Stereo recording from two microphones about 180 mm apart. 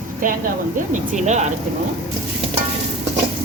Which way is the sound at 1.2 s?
40° right (ahead or behind).